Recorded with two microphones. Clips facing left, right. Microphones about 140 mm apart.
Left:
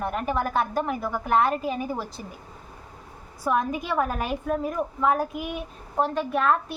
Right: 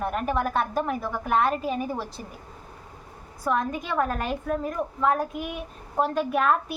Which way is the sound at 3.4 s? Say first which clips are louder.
Left 1 dB; 5° left (ahead or behind).